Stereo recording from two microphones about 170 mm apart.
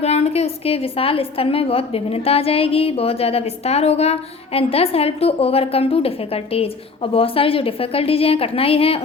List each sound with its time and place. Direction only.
0.0 s a woman's voice: 40° left (ahead or behind)